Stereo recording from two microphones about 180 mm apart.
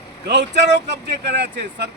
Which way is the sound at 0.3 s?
70° right (ahead or behind).